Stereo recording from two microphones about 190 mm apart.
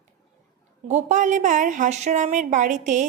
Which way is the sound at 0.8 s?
40° right (ahead or behind).